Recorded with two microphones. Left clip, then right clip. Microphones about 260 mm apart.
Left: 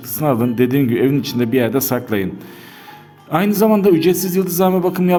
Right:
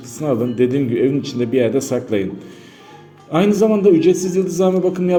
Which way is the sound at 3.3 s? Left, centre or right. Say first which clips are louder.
Even; left.